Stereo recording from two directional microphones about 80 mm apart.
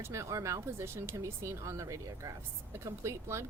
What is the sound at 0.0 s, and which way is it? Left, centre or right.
Speech, right.